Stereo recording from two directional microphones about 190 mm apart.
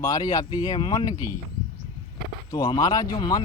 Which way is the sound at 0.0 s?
20° left (ahead or behind).